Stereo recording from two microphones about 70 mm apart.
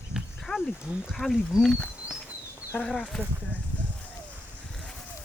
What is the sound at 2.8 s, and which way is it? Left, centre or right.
Speech, centre.